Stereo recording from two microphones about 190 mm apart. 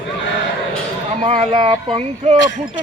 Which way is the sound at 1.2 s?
30° right (ahead or behind).